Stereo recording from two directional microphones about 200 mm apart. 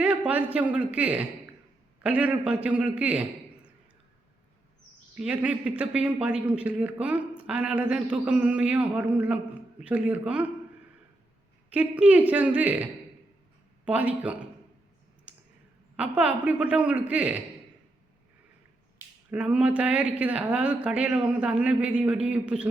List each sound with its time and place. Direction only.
0.0 s a man's voice: 5° right (ahead or behind)
5.1 s a man's voice: 5° right (ahead or behind)
11.7 s a man's voice: 5° right (ahead or behind)
16.0 s speech: 5° right (ahead or behind)
19.3 s speech: 5° right (ahead or behind)